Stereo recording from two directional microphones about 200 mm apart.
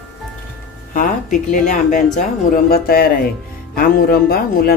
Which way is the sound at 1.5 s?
40° left (ahead or behind).